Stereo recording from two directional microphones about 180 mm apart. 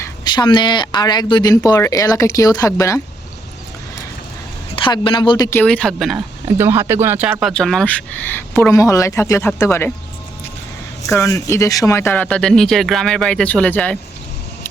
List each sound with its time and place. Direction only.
0.0 s speech: 25° left (ahead or behind)
4.7 s speech: 30° left (ahead or behind)
5.5 s speech: 10° left (ahead or behind)
6.6 s speech: 15° right (ahead or behind); by 9.9 s 15° left (ahead or behind)
11.1 s speech: 15° left (ahead or behind)